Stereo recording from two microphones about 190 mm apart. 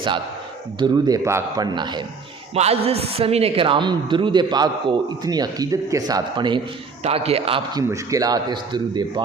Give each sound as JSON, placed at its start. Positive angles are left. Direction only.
{"t": 0.8, "sound": "speech", "side_deg": -20}